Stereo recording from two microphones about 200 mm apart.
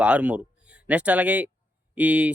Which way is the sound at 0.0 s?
5° right (ahead or behind).